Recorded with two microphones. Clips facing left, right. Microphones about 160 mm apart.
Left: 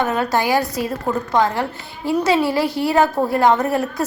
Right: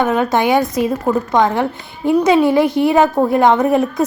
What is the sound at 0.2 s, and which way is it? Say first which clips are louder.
A woman's voice: right 4 dB; 20° right (ahead or behind).